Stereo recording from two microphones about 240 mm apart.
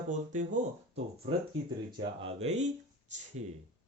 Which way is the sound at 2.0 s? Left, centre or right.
Centre.